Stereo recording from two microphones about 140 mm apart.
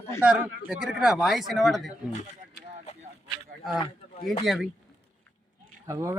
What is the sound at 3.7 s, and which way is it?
Speech, 35° left (ahead or behind).